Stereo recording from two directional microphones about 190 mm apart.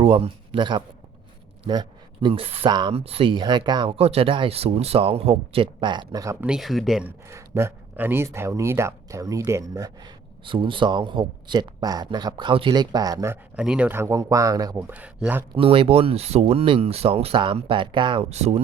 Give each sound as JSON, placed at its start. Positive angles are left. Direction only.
{"t": 0.0, "sound": "speech", "side_deg": -30}
{"t": 6.4, "sound": "speech", "side_deg": 0}
{"t": 7.3, "sound": "speech", "side_deg": -15}
{"t": 15.5, "sound": "speech", "side_deg": -30}